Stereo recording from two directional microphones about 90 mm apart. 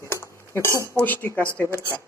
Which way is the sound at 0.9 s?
20° left (ahead or behind).